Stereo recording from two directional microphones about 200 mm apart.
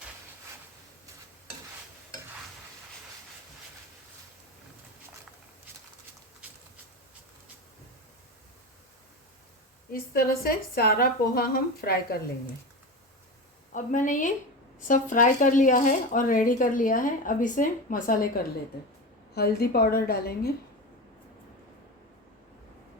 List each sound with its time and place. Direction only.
9.9 s speech: 50° left (ahead or behind)
13.7 s speech: 40° left (ahead or behind)
19.3 s speech: 55° left (ahead or behind)